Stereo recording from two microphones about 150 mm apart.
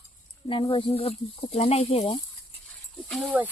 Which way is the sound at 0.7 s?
40° left (ahead or behind).